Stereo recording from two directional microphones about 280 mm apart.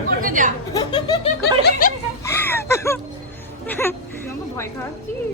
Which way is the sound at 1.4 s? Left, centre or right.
Left.